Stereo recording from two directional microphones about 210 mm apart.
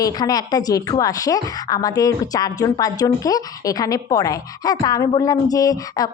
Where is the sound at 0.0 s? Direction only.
15° left (ahead or behind).